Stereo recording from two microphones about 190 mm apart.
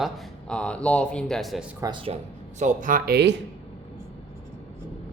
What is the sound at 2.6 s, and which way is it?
Speech, 40° right (ahead or behind).